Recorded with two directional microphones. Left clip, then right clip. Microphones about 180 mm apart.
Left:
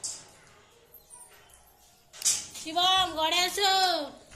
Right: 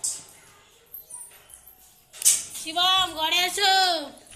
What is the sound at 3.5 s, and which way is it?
Speech, 5° left (ahead or behind).